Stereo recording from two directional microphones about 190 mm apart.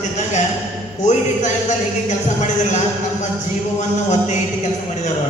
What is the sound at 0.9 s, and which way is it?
Speech, 40° left (ahead or behind).